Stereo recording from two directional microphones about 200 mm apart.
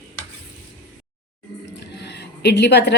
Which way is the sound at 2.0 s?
55° left (ahead or behind).